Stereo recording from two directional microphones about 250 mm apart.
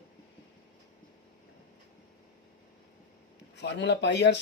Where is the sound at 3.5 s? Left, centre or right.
Left.